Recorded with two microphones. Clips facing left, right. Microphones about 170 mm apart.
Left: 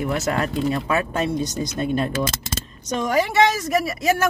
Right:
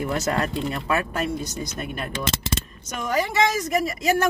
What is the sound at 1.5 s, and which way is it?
Speech, 25° left (ahead or behind).